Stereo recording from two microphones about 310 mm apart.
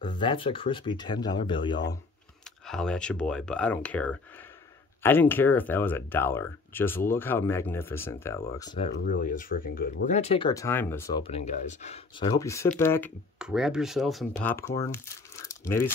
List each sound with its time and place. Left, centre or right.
0.0 s speech: centre
2.6 s speech: centre
15.4 s coin: centre